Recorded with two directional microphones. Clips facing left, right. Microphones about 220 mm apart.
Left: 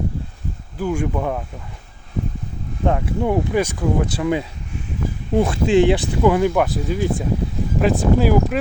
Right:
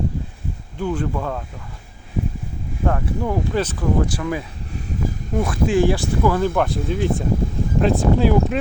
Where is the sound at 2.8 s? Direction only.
20° left (ahead or behind).